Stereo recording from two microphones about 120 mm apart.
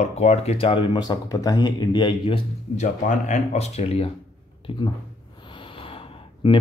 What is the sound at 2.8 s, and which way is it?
Speech, 90° left.